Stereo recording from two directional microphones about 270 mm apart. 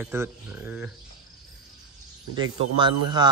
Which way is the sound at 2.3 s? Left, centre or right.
Centre.